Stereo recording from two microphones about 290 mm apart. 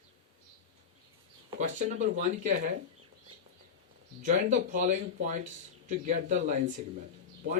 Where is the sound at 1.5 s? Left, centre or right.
Right.